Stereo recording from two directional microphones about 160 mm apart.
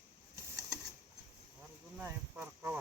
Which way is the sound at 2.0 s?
15° right (ahead or behind).